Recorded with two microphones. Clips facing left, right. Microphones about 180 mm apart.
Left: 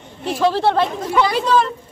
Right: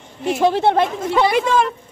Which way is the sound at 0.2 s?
20° right (ahead or behind).